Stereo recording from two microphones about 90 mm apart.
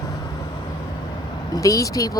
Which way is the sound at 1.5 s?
40° left (ahead or behind).